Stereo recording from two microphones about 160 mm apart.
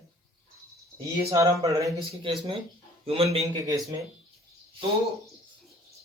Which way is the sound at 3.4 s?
25° right (ahead or behind).